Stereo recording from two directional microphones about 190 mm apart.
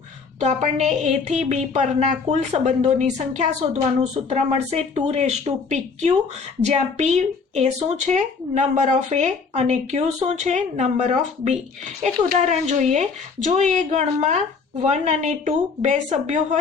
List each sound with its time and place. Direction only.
0.3 s a woman's voice: 40° right (ahead or behind)